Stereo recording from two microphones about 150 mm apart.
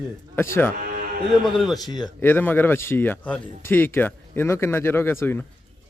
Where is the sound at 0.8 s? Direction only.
65° right (ahead or behind).